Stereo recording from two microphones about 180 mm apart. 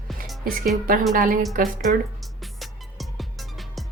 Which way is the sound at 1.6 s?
50° right (ahead or behind).